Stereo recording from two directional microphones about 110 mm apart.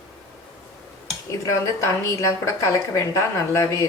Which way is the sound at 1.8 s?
25° left (ahead or behind).